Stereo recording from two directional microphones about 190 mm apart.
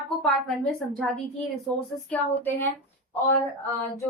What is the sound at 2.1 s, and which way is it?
Speech, 10° left (ahead or behind).